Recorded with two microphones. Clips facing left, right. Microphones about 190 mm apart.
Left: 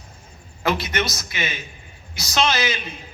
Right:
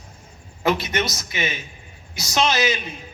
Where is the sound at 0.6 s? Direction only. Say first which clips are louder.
Right 1 dB; 20° right (ahead or behind).